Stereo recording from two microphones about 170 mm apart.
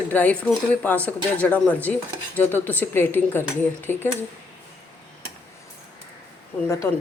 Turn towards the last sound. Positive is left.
turn(degrees=15)  # may be behind; listen again after turning